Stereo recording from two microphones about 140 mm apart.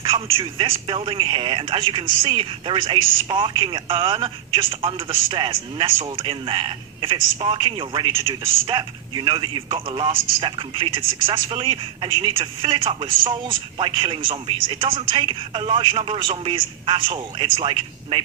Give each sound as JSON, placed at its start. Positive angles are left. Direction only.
{"t": 0.1, "sound": "a man's voice", "side_deg": -40}